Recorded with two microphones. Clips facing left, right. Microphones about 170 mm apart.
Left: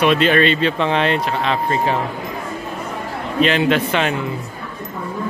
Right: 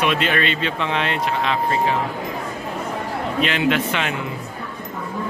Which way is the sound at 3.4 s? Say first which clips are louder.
Left 5 dB; 35° left (ahead or behind).